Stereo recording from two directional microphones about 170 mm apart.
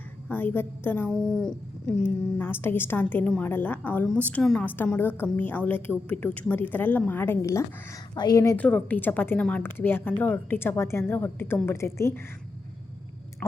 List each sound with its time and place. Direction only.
0.3 s a woman's voice: 10° left (ahead or behind)